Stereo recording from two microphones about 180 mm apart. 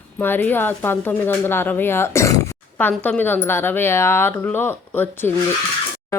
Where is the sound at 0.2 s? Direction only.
10° left (ahead or behind).